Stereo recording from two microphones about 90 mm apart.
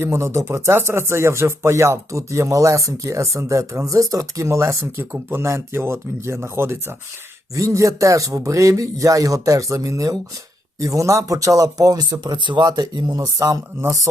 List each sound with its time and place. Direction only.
0.0 s speech: 30° right (ahead or behind); by 13.2 s 50° right (ahead or behind)
13.2 s speech: 35° right (ahead or behind)